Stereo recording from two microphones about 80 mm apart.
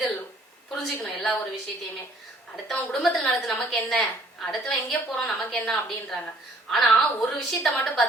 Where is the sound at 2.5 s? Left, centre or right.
Centre.